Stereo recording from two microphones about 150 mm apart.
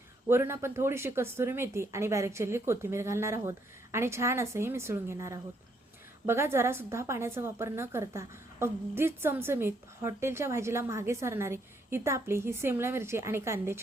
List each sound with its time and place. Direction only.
0.3 s a woman's voice: 15° right (ahead or behind)